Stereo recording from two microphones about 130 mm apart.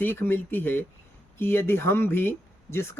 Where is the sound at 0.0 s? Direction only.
15° left (ahead or behind).